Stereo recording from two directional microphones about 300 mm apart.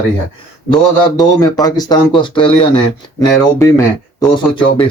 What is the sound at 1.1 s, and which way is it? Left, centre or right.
Speech, centre.